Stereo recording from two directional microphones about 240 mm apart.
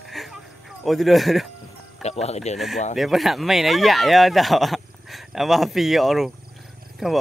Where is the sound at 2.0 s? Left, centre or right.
Left.